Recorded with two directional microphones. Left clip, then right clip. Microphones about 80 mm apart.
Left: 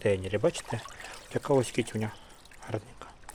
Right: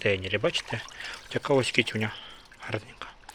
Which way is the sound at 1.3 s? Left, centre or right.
Left.